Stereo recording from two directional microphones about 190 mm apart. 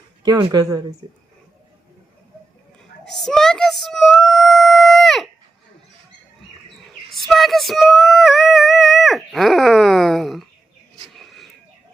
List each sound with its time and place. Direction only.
0.2 s speech: 20° right (ahead or behind)
3.1 s child singing: centre (ahead or behind)
7.1 s female singing: centre (ahead or behind)
11.1 s a sound: centre (ahead or behind)